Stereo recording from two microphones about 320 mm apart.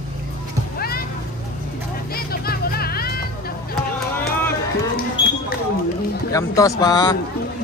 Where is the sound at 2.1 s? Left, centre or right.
Left.